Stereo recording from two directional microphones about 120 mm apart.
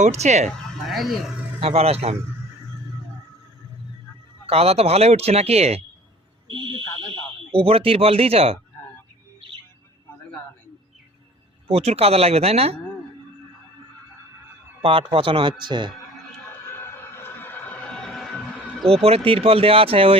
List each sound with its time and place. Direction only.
0.0 s speech: 70° right (ahead or behind)
0.9 s speech: centre (ahead or behind)
1.6 s speech: 55° right (ahead or behind)
4.4 s speech: 55° right (ahead or behind)
7.5 s speech: 50° right (ahead or behind)
11.7 s speech: 55° right (ahead or behind)
14.8 s speech: 50° right (ahead or behind)
16.7 s a sound: 20° left (ahead or behind); by 18.3 s 5° left (ahead or behind)
18.9 s speech: 55° right (ahead or behind)